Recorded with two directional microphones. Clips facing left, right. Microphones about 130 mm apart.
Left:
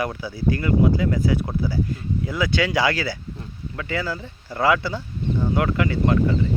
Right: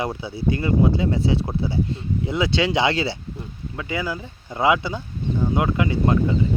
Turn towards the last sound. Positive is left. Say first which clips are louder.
# even
turn(degrees=-20)  # may be behind; listen again after turning